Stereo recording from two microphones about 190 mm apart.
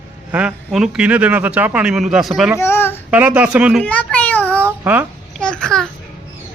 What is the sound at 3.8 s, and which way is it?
Speech, 5° left (ahead or behind).